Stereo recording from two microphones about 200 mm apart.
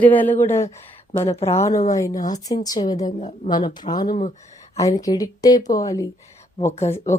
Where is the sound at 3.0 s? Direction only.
35° left (ahead or behind).